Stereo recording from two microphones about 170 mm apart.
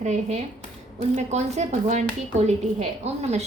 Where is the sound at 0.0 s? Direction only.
45° right (ahead or behind).